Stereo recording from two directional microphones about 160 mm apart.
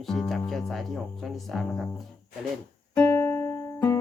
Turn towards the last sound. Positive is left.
turn(degrees=15)  # may be behind; listen again after turning